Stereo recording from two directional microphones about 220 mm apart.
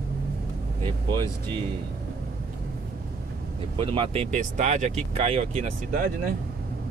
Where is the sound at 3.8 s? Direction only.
25° right (ahead or behind); by 6.4 s 40° right (ahead or behind).